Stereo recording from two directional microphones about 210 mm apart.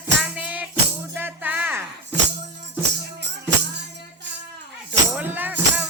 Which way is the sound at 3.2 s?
55° right (ahead or behind).